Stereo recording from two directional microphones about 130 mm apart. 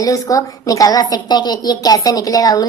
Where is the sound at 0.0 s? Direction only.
25° left (ahead or behind).